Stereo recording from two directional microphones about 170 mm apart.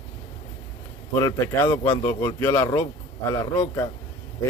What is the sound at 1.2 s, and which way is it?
Speech, 15° left (ahead or behind).